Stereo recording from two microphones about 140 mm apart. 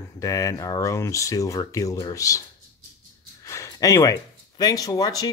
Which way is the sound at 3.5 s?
25° left (ahead or behind).